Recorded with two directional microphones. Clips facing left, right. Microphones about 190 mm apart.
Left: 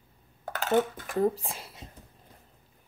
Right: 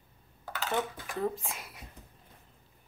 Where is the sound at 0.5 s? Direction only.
50° left (ahead or behind); by 1.8 s 30° left (ahead or behind).